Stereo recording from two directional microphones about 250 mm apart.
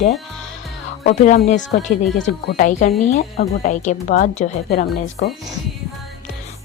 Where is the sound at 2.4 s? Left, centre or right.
Left.